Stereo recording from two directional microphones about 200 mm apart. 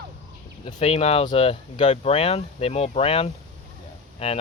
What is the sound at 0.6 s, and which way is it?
Speech, 30° left (ahead or behind).